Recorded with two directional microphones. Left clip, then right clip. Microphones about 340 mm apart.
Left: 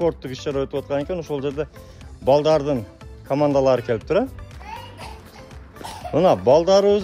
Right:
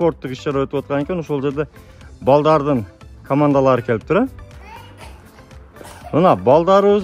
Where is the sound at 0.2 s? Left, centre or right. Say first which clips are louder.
Right 4 dB; centre.